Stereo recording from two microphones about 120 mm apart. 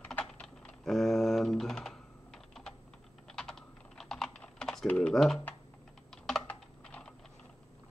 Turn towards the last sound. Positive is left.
turn(degrees=10)  # may be behind; listen again after turning